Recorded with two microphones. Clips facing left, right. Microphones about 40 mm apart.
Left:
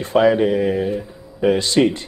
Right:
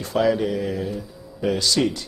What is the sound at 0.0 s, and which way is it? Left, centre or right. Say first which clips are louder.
Speech: left 6 dB; left.